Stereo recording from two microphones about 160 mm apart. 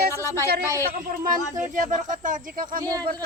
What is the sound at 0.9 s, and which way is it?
Speech, 60° right (ahead or behind).